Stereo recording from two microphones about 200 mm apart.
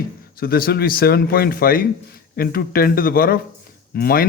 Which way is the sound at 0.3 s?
50° left (ahead or behind).